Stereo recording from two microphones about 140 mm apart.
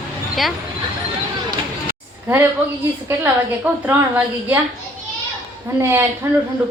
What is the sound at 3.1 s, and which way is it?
A woman's voice, 15° right (ahead or behind).